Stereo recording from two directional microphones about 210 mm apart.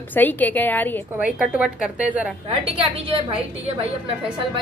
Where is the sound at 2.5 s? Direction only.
25° right (ahead or behind).